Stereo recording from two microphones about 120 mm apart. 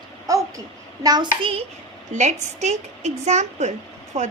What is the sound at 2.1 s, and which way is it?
A woman's voice, 80° right.